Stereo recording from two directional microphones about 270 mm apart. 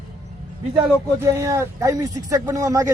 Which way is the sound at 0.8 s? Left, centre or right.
Centre.